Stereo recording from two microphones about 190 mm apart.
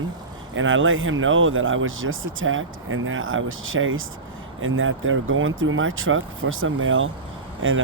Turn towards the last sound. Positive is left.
turn(degrees=-90)